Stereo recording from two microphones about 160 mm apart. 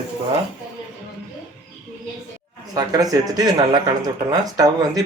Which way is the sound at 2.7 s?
20° right (ahead or behind).